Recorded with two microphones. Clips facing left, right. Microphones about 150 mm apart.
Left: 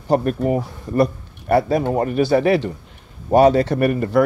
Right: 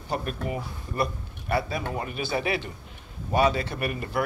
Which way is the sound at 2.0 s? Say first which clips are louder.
Left 13 dB; 65° left (ahead or behind).